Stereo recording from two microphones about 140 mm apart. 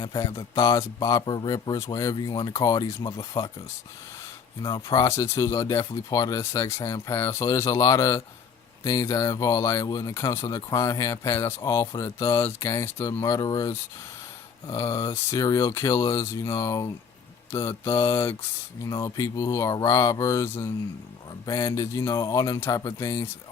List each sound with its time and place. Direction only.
0.0 s speech: 25° left (ahead or behind)
4.6 s speech: 25° left (ahead or behind)